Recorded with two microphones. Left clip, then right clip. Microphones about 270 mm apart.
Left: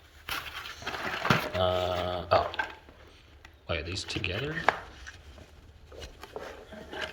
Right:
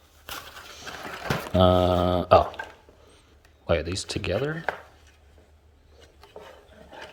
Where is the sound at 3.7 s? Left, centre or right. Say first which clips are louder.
Right 8 dB; right.